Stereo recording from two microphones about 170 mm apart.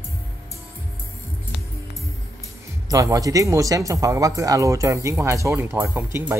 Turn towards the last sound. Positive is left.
turn(degrees=-15)  # may be behind; listen again after turning